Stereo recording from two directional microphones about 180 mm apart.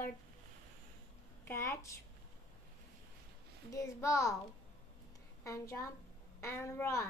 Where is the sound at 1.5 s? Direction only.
15° left (ahead or behind).